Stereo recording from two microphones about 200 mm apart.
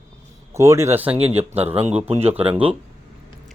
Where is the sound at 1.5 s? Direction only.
30° right (ahead or behind).